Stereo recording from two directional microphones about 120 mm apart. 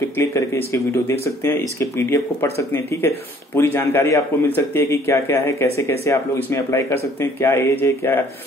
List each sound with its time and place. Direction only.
0.2 s speech: 25° left (ahead or behind)